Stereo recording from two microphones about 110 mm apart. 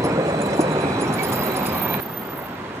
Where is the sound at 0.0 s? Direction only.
25° right (ahead or behind).